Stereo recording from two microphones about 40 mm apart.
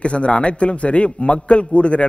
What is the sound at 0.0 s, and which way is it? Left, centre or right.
A man's voice, left.